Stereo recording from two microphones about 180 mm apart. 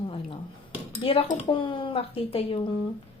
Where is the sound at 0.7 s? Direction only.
30° left (ahead or behind).